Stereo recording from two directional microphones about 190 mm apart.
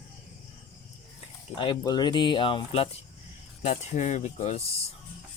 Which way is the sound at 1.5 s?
25° left (ahead or behind).